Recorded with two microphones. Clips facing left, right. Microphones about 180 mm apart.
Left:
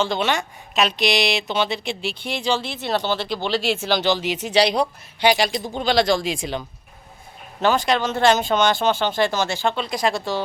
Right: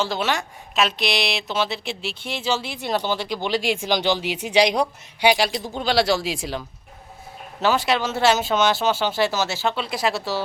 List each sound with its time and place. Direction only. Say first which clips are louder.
0.0 s speech: left 2 dB; 5° right (ahead or behind)